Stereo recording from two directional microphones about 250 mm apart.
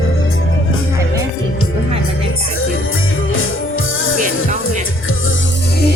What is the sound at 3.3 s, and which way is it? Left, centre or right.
Music, left.